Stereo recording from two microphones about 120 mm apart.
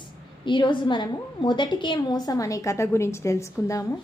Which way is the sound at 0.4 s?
45° left (ahead or behind).